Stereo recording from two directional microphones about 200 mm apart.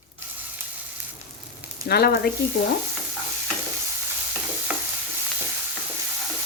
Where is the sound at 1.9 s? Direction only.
50° left (ahead or behind).